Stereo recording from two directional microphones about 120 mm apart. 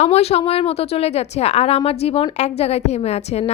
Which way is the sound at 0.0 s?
60° left (ahead or behind).